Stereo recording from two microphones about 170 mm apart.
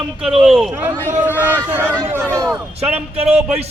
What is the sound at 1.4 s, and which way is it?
Speech, 10° right (ahead or behind).